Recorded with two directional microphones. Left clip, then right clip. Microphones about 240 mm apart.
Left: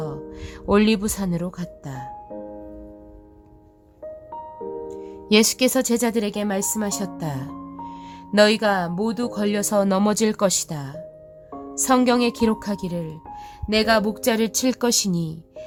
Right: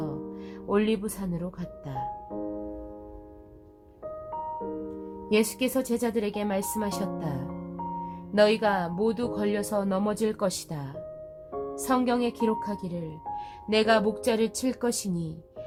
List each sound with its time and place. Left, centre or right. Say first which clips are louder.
0.7 s speech: left 7 dB; left
5.3 s speech: left 8 dB; left